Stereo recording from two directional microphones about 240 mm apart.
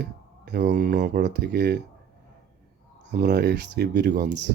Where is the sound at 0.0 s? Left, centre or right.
Right.